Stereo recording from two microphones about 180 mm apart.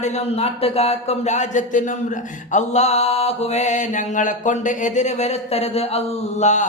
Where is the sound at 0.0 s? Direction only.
35° left (ahead or behind).